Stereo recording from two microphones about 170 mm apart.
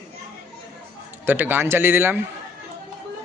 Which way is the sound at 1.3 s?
10° right (ahead or behind).